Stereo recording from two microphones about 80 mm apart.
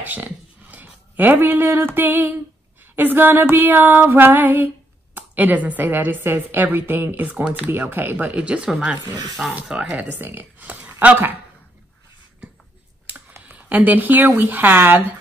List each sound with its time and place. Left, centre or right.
0.0 s a woman's voice: right
8.3 s speech: centre
9.8 s speech: centre
10.1 s speech: right
13.6 s a woman's voice: right